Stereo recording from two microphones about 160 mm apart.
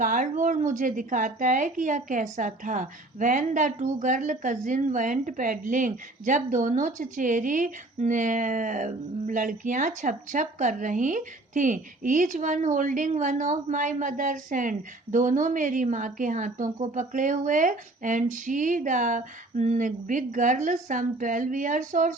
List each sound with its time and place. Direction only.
0.0 s a woman's voice: 55° right (ahead or behind)